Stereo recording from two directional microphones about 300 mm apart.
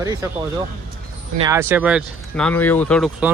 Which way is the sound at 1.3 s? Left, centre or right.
Centre.